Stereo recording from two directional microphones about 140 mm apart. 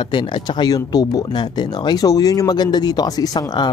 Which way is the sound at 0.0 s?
35° left (ahead or behind).